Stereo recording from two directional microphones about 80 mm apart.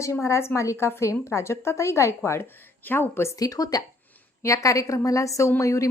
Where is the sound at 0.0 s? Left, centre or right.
Left.